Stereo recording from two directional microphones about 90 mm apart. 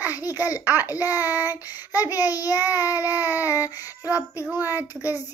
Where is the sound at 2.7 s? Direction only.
20° right (ahead or behind).